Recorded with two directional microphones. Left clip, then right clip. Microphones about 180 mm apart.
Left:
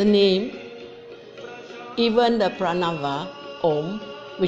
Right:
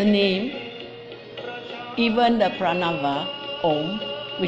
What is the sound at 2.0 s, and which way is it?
Speech, 35° left (ahead or behind).